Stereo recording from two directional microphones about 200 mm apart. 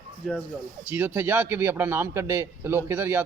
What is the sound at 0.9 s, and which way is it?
A man's voice, 10° right (ahead or behind).